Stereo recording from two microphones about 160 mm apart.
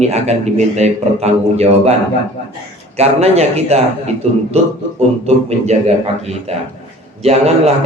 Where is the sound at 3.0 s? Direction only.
40° right (ahead or behind).